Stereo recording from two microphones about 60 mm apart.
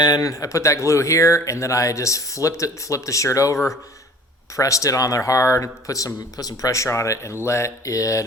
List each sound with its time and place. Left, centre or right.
0.1 s speech: left
6.3 s speech: left
7.9 s speech: left